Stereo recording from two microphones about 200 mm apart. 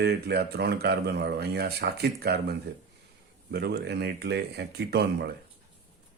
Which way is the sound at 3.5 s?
55° right (ahead or behind).